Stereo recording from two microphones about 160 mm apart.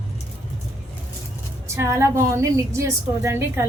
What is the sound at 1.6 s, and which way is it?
A woman's voice, 15° right (ahead or behind).